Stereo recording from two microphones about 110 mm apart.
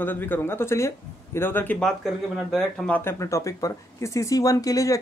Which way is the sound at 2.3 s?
5° left (ahead or behind).